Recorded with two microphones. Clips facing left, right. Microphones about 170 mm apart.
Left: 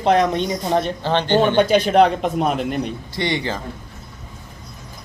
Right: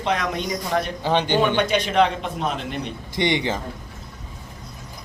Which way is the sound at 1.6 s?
35° left (ahead or behind).